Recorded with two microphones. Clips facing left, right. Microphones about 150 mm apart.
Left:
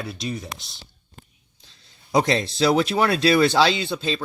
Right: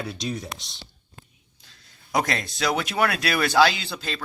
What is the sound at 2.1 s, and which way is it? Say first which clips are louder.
Speech: left 5 dB; 25° left (ahead or behind).